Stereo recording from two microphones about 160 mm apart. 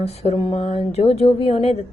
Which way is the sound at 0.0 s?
40° left (ahead or behind).